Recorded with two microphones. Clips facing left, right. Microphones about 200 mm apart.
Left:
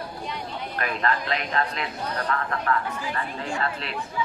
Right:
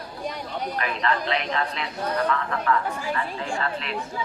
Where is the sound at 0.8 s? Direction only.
45° left (ahead or behind).